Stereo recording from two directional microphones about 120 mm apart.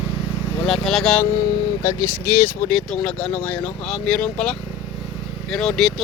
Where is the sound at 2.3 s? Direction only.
20° left (ahead or behind).